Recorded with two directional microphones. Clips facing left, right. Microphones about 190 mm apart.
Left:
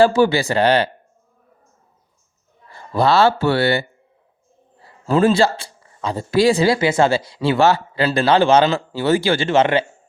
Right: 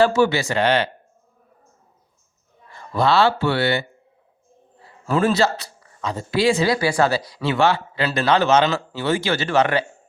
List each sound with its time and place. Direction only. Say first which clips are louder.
0.0 s speech: left 3 dB; 30° left (ahead or behind)
2.6 s a man's voice: left 2 dB; 35° left (ahead or behind)
5.0 s speech: left 4 dB; 30° left (ahead or behind)